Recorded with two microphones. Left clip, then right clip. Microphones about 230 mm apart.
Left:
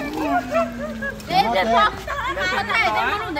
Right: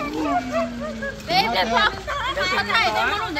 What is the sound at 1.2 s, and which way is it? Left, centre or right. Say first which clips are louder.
Speech: left 2 dB; right.